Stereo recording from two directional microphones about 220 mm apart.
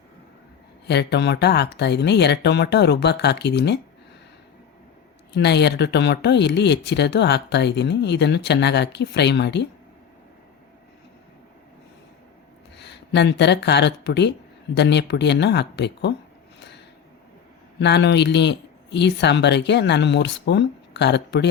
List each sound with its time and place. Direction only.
0.9 s speech: 50° left (ahead or behind)
5.3 s speech: 50° left (ahead or behind)
12.7 s speech: 50° left (ahead or behind)
16.6 s a sound: 50° left (ahead or behind)
17.7 s speech: 50° left (ahead or behind)